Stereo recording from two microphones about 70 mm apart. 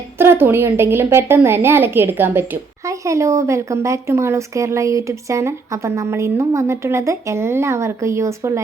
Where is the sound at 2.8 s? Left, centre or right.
Right.